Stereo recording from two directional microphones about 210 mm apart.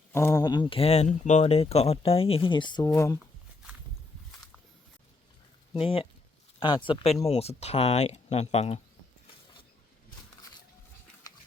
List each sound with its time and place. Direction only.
0.1 s speech: 10° left (ahead or behind)
5.7 s speech: 25° left (ahead or behind)